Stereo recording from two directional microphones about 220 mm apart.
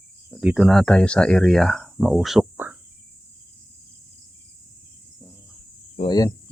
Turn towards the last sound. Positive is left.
turn(degrees=20)  # may be behind; listen again after turning